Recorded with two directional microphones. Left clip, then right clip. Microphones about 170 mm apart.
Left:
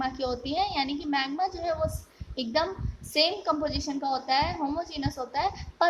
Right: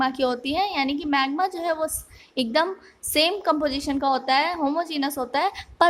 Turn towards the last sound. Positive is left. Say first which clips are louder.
# right 5 dB
turn(degrees=-40)  # may be behind; listen again after turning